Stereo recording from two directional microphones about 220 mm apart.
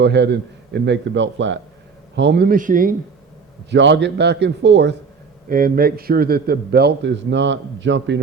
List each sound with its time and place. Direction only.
0.0 s a man's voice: 50° right (ahead or behind)
3.7 s a man's voice: 55° right (ahead or behind)
5.5 s a man's voice: 40° right (ahead or behind)